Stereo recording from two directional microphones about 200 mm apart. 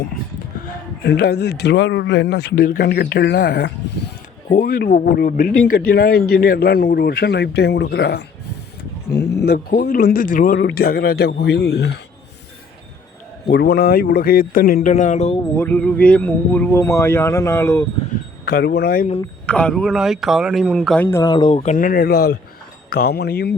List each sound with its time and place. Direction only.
1.0 s speech: 60° left (ahead or behind)
9.4 s speech: 50° left (ahead or behind)
10.6 s speech: 55° left (ahead or behind)
13.5 s speech: 55° left (ahead or behind); by 15.4 s 35° left (ahead or behind)
15.5 s speech: 5° left (ahead or behind)
18.4 s speech: 50° left (ahead or behind)
19.5 s speech: 5° left (ahead or behind); by 23.6 s 55° left (ahead or behind)